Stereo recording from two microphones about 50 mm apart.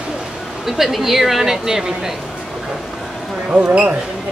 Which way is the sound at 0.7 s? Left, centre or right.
Centre.